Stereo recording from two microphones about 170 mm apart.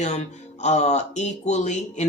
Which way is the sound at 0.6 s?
40° left (ahead or behind).